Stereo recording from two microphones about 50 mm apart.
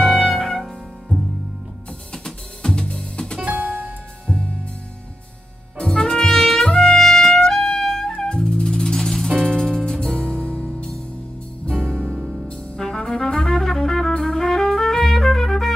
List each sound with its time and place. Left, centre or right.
0.0 s music: centre
2.1 s music: centre
3.3 s music: right
4.3 s music: centre
5.8 s trumpet: centre
8.1 s music: centre
10.3 s music: right
12.0 s music: right
12.7 s music: centre